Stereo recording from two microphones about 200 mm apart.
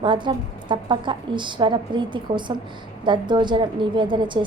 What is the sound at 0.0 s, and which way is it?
A woman's voice, 25° right (ahead or behind).